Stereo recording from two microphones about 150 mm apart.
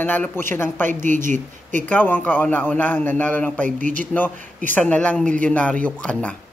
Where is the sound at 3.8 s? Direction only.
60° right (ahead or behind).